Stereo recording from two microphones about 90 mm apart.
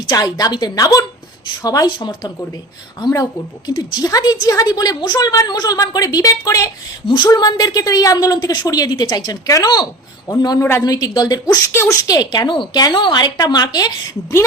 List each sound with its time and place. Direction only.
0.1 s a woman's voice: 45° left (ahead or behind)
10.6 s a woman's voice: 30° left (ahead or behind)
10.8 s a woman's voice: 45° left (ahead or behind)
11.7 s speech: 30° left (ahead or behind)
12.0 s a woman's voice: 45° left (ahead or behind)
13.3 s a woman's voice: 50° left (ahead or behind)